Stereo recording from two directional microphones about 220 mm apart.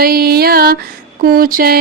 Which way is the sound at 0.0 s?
45° right (ahead or behind).